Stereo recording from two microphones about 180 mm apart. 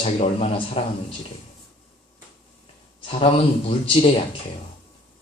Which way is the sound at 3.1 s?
35° left (ahead or behind).